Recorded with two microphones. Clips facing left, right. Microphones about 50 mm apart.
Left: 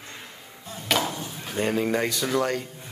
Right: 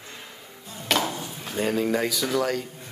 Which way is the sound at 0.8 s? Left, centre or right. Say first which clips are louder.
Even; centre.